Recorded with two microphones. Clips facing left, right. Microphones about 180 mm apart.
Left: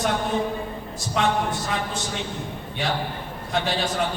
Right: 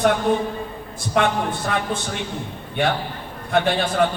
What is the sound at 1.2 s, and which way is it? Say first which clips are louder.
A man's voice: right 3 dB; 55° right (ahead or behind).